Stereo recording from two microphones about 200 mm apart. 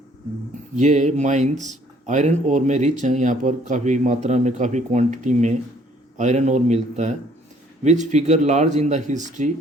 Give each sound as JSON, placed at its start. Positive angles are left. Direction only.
{"t": 0.8, "sound": "speech", "side_deg": -35}